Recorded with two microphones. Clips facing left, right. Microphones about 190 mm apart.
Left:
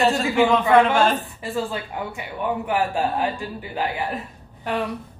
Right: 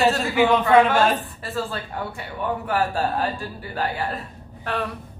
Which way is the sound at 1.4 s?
15° left (ahead or behind).